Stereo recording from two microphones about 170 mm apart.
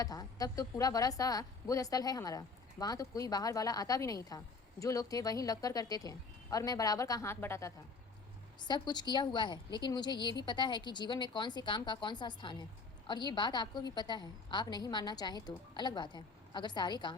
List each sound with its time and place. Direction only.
0.0 s a woman's voice: 20° left (ahead or behind)
8.6 s a woman's voice: 25° left (ahead or behind)